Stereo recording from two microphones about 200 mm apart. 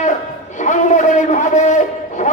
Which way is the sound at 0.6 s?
40° left (ahead or behind).